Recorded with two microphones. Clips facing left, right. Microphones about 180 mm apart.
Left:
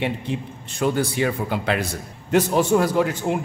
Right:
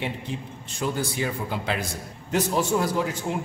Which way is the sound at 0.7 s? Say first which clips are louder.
Left 6 dB; 65° left (ahead or behind).